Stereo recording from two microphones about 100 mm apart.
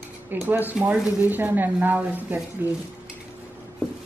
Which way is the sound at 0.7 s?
10° right (ahead or behind).